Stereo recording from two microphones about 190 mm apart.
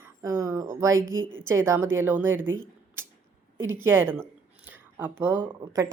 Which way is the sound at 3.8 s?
10° right (ahead or behind).